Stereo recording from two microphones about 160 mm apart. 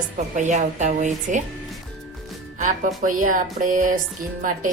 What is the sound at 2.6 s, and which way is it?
Music, 55° right (ahead or behind).